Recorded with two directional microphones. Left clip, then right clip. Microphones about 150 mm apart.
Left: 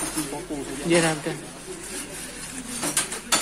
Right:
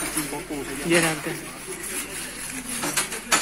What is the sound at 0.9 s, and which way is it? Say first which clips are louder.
Speech: even; 20° left (ahead or behind).